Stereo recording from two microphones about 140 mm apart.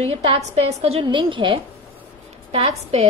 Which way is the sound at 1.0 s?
35° right (ahead or behind).